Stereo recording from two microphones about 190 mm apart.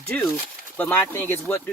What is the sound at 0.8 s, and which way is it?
Speech, 10° left (ahead or behind).